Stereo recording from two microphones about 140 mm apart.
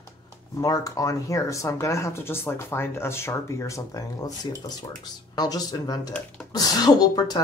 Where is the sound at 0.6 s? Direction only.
25° left (ahead or behind).